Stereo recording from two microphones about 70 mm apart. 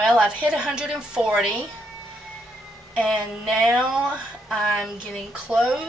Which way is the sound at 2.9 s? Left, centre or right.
Centre.